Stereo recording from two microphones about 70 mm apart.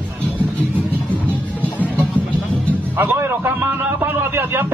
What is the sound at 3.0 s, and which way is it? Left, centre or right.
Speech, right.